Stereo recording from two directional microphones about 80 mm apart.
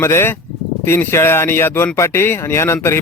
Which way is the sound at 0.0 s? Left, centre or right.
Left.